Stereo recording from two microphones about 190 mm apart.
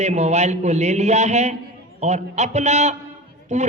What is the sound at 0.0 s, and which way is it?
A woman's voice, 35° right (ahead or behind).